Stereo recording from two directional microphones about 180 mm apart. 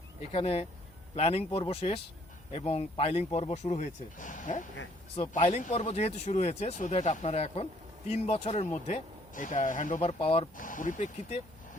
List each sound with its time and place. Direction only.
0.2 s speech: 35° left (ahead or behind)
10.6 s speech: 45° left (ahead or behind)